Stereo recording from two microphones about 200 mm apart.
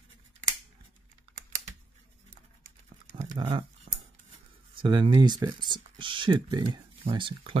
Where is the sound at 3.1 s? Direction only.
30° right (ahead or behind).